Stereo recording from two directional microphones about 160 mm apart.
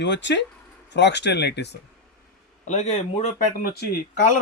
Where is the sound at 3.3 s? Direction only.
65° left (ahead or behind).